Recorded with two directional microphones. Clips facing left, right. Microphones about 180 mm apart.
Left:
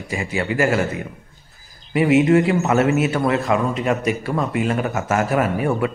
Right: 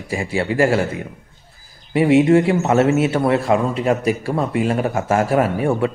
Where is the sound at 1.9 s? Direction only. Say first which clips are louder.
Right 2 dB; 30° right (ahead or behind).